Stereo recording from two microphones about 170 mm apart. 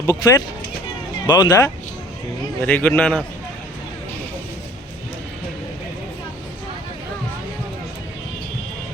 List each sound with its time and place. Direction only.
0.0 s speech: 20° left (ahead or behind)
2.6 s a man's voice: 10° left (ahead or behind)